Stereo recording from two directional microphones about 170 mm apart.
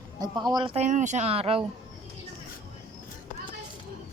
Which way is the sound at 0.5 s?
30° right (ahead or behind).